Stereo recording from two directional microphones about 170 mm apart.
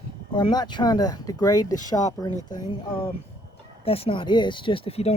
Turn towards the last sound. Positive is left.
turn(degrees=35)  # may be behind; listen again after turning